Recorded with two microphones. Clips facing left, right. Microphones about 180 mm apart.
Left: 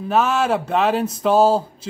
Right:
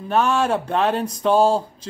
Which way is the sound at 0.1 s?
5° left (ahead or behind).